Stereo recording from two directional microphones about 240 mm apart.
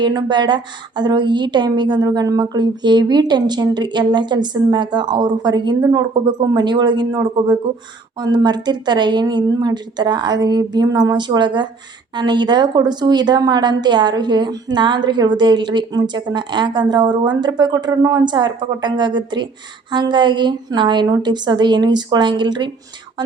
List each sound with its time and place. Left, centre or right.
0.0 s a woman's voice: centre